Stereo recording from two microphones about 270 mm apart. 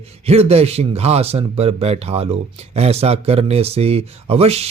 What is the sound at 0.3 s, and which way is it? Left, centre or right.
A man's voice, right.